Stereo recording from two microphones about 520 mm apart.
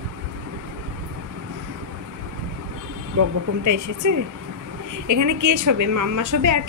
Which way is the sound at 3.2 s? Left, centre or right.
Right.